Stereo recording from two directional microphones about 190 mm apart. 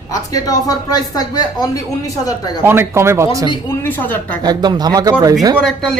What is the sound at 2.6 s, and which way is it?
Speech, 10° right (ahead or behind).